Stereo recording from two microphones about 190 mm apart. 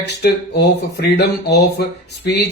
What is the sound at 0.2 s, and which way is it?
Speech, 55° left (ahead or behind).